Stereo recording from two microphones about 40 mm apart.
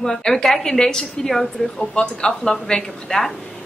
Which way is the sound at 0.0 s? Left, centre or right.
Centre.